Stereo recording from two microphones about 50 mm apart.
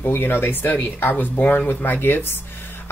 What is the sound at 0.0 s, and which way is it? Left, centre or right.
Speech, left.